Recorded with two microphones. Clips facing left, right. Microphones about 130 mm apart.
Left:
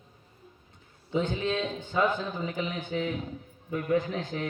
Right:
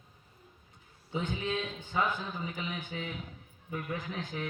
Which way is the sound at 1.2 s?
30° left (ahead or behind).